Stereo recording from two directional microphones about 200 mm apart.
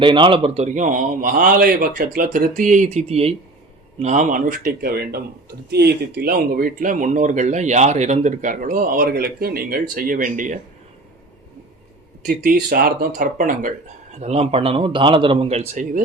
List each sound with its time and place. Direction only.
0.0 s speech: 25° right (ahead or behind); by 10.6 s 40° right (ahead or behind)
12.2 s speech: 45° right (ahead or behind)
14.2 s speech: 30° right (ahead or behind)